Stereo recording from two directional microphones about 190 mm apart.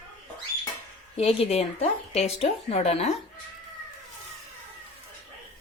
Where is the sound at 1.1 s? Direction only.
30° left (ahead or behind).